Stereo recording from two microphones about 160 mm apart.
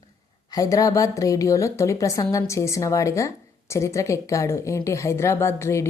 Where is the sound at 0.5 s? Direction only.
20° left (ahead or behind).